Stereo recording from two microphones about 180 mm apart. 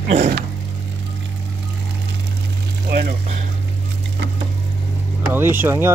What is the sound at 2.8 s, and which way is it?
Speech, 60° right (ahead or behind).